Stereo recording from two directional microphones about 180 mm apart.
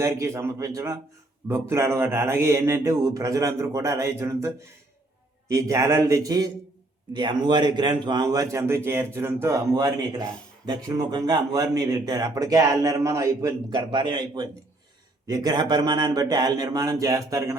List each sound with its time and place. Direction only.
0.0 s speech: 15° right (ahead or behind)